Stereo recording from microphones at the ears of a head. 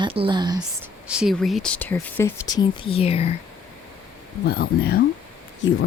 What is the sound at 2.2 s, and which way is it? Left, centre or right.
Speech, left.